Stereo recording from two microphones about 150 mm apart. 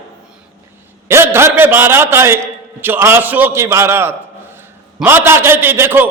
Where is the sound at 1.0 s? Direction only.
15° right (ahead or behind).